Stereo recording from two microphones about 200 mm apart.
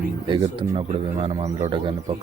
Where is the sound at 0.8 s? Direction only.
30° right (ahead or behind).